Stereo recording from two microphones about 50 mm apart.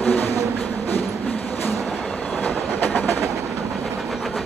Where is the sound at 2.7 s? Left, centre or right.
Left.